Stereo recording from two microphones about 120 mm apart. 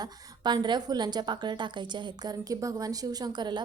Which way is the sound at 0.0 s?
35° right (ahead or behind).